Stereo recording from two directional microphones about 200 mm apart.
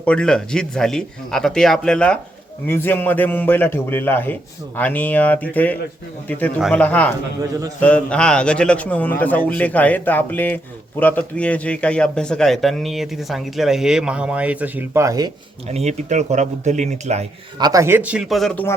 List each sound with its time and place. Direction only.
0.0 s a man's voice: 5° left (ahead or behind); by 15.3 s 15° right (ahead or behind)
15.6 s speech: 35° right (ahead or behind)
17.6 s speech: 15° right (ahead or behind); by 18.7 s 5° left (ahead or behind)